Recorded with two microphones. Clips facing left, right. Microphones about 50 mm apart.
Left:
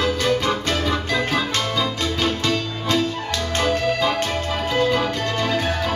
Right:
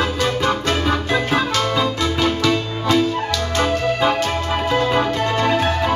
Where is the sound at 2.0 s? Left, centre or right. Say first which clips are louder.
Right 4 dB; right.